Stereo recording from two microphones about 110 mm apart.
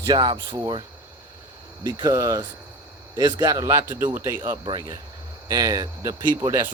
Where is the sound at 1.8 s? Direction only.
35° right (ahead or behind).